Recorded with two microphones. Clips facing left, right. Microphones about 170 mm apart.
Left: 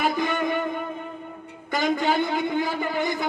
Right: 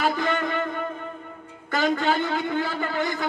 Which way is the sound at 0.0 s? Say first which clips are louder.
Even; 15° left (ahead or behind).